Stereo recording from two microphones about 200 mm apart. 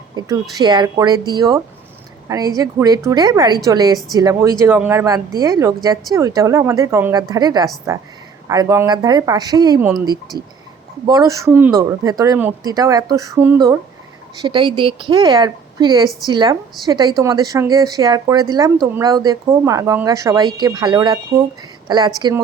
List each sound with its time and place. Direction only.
0.5 s speech: 20° right (ahead or behind)
14.4 s speech: 25° right (ahead or behind)